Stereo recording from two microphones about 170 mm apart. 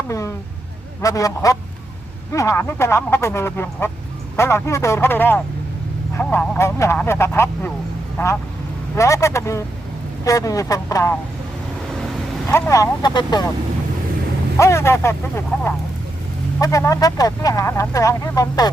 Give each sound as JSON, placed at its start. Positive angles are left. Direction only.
{"t": 0.1, "sound": "speech", "side_deg": 15}
{"t": 9.0, "sound": "speech", "side_deg": 15}
{"t": 12.5, "sound": "speech", "side_deg": 15}
{"t": 14.6, "sound": "speech", "side_deg": 15}